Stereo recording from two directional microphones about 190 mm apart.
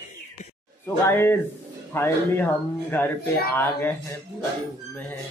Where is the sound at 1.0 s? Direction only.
10° left (ahead or behind).